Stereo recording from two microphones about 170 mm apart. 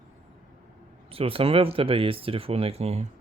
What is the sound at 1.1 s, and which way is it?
Speech, 35° right (ahead or behind).